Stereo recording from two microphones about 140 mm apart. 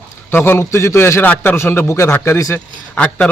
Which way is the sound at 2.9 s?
10° left (ahead or behind).